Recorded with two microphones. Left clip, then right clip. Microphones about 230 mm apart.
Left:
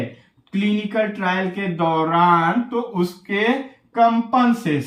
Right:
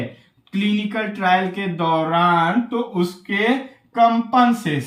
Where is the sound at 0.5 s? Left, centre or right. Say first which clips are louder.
Left 2 dB; centre.